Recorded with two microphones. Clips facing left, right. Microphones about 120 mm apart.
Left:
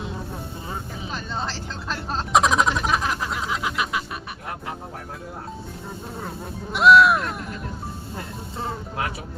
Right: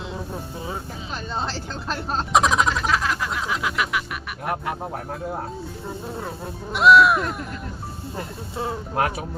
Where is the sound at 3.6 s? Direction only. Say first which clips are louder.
Right 1 dB; 25° left (ahead or behind).